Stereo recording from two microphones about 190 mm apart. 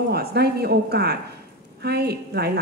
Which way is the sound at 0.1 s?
55° right (ahead or behind).